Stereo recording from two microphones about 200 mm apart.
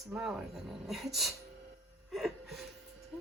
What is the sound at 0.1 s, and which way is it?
Speech, centre (ahead or behind).